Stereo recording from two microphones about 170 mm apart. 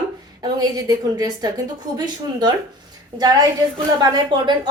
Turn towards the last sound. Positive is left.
turn(degrees=-25)  # may be behind; listen again after turning